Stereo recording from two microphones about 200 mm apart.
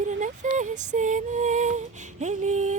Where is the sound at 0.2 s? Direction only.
40° right (ahead or behind).